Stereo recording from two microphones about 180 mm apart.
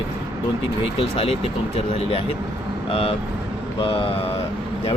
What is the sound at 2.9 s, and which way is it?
Speech, 30° left (ahead or behind).